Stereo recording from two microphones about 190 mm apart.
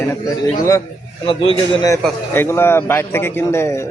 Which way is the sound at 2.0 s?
10° left (ahead or behind).